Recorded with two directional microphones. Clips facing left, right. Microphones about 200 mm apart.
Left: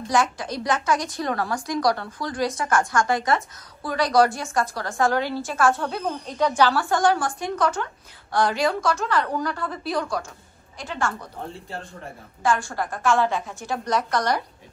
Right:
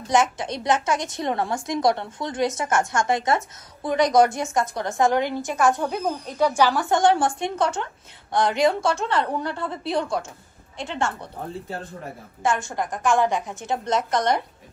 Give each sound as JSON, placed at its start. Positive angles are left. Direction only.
{"t": 0.1, "sound": "a woman's voice", "side_deg": -20}
{"t": 12.4, "sound": "a woman's voice", "side_deg": -20}